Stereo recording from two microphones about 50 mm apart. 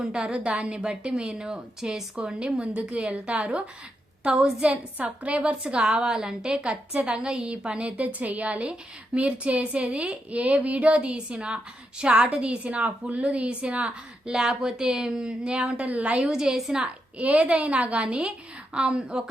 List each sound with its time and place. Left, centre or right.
0.0 s a woman's voice: centre
2.2 s a woman's voice: right
4.2 s a woman's voice: centre
4.6 s a woman's voice: right; by 16.7 s centre
16.7 s a woman's voice: right